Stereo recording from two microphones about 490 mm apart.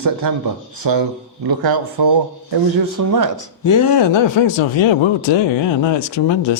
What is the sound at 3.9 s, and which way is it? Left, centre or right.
Speech, left.